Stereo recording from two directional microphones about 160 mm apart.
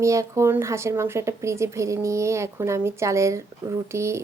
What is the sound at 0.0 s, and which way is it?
A woman's voice, 20° right (ahead or behind).